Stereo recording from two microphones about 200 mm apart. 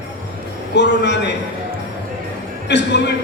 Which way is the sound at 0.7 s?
60° left (ahead or behind).